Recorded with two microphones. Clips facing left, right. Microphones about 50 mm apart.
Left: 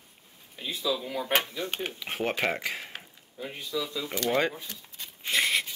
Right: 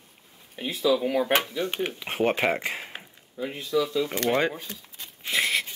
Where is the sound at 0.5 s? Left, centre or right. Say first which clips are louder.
Right 7 dB; right.